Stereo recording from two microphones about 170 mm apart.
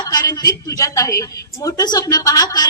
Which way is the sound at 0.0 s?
25° left (ahead or behind).